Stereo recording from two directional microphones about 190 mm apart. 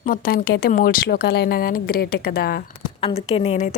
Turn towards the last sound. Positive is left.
turn(degrees=35)  # may be behind; listen again after turning